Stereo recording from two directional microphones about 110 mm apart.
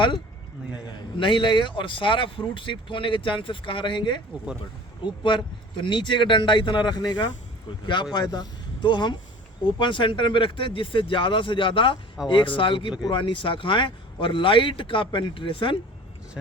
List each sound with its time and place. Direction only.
0.9 s speech: 45° left (ahead or behind)